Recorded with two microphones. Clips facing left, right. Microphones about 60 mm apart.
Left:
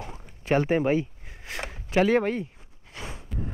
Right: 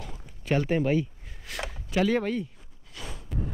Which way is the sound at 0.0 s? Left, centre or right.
Left.